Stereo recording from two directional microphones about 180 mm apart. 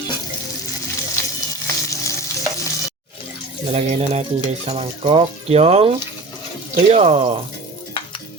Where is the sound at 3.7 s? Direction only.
35° right (ahead or behind).